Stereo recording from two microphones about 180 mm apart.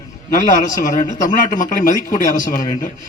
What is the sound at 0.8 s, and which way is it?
Speech, 45° left (ahead or behind).